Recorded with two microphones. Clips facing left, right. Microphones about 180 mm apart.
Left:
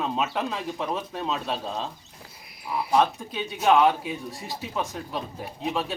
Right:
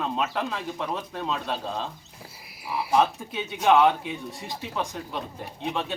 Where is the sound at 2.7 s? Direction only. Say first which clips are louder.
Even; 5° right (ahead or behind).